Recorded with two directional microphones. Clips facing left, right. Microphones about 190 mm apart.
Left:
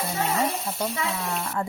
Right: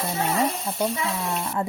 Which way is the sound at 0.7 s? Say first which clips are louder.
Right 3 dB; centre (ahead or behind).